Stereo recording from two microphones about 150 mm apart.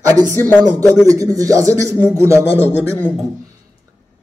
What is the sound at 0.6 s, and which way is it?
Speech, 25° right (ahead or behind).